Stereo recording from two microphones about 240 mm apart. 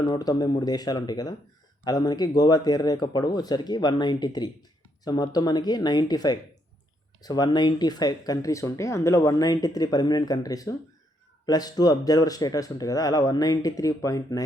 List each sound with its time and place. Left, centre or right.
0.0 s speech: centre